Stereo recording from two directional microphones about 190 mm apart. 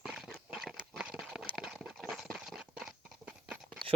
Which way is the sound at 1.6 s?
5° right (ahead or behind).